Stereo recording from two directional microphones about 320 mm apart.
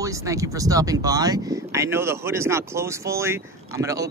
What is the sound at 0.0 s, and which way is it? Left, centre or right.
Speech, centre.